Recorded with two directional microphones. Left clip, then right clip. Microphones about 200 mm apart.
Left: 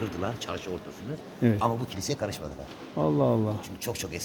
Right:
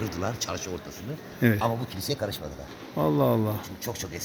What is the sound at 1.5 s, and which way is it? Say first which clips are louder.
Speech: even; 30° right (ahead or behind).